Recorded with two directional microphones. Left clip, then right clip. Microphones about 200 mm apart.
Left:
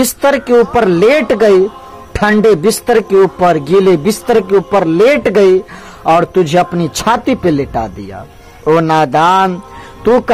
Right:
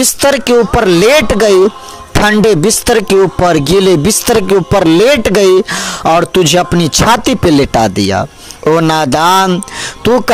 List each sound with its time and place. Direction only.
0.2 s speech: 50° right (ahead or behind)